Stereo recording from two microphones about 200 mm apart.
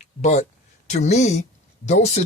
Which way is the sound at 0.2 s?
35° left (ahead or behind).